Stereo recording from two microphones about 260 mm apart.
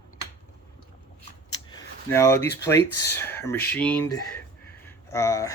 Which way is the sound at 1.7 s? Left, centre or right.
Centre.